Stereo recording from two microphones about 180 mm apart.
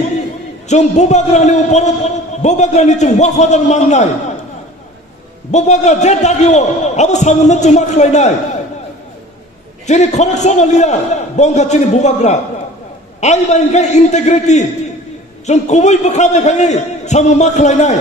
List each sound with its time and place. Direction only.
0.7 s a man's voice: 40° left (ahead or behind)
5.5 s a man's voice: 40° left (ahead or behind)
9.8 s a man's voice: 40° left (ahead or behind)